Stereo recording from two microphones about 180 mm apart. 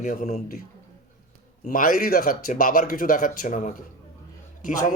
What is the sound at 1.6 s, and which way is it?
Speech, 50° left (ahead or behind).